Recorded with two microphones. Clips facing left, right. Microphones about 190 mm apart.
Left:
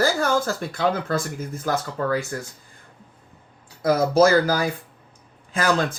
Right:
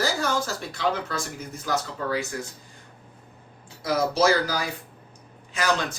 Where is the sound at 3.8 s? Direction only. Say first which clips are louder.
Left 5 dB; 55° left (ahead or behind).